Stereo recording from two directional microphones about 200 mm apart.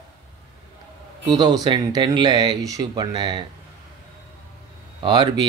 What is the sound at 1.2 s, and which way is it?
Speech, 20° right (ahead or behind).